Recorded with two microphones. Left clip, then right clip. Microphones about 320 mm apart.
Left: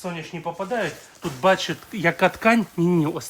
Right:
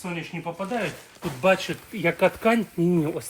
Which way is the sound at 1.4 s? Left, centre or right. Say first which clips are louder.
Left 2 dB; left.